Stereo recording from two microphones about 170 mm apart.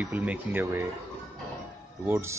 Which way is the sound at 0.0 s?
10° right (ahead or behind).